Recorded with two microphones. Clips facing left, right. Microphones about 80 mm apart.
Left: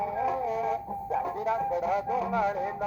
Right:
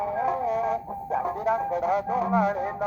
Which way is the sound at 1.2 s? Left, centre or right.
Right.